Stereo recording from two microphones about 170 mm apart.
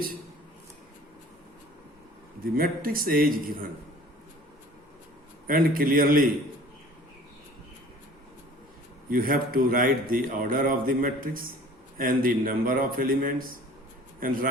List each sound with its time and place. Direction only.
2.4 s a man's voice: 60° right (ahead or behind)
5.5 s a man's voice: 55° right (ahead or behind)
9.0 s a man's voice: 55° right (ahead or behind)